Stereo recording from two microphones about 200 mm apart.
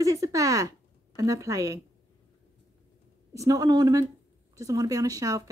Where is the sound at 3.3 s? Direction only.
15° right (ahead or behind).